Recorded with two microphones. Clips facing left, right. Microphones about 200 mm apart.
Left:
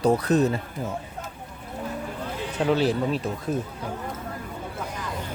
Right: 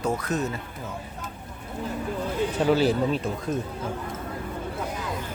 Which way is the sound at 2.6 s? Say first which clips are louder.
Even; centre (ahead or behind).